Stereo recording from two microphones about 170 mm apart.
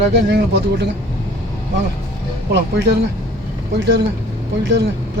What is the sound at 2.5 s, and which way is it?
Speech, 85° right.